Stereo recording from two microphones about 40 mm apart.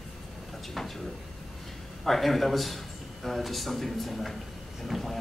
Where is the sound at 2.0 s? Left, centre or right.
Centre.